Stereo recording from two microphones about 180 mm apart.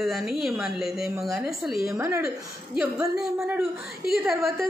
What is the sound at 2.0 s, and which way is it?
Speech, 15° right (ahead or behind).